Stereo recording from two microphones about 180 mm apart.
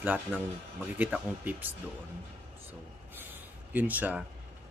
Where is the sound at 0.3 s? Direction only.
10° right (ahead or behind).